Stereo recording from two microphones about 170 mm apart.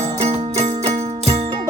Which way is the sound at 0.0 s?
40° right (ahead or behind).